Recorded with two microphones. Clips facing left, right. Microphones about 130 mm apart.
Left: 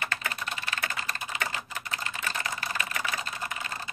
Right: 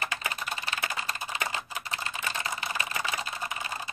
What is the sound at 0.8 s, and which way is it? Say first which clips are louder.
Typing: right 1 dB; 15° right (ahead or behind).